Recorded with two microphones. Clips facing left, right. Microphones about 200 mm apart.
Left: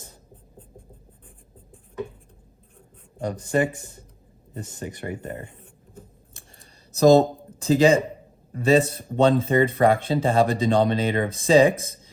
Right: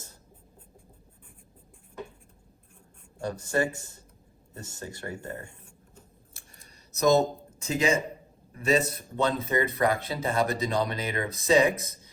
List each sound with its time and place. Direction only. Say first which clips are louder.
3.2 s speech: left 5 dB; 15° left (ahead or behind)
6.6 s a sound: left 9 dB; 30° left (ahead or behind)
8.5 s speech: left 6 dB; 30° left (ahead or behind)